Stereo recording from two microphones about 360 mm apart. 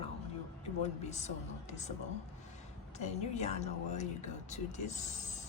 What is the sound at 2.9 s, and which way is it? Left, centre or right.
Speech, centre.